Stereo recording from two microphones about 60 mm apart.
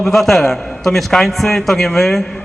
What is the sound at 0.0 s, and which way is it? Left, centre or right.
A man's voice, centre.